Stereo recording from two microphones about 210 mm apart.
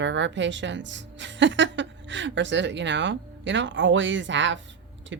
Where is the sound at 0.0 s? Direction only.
60° right (ahead or behind).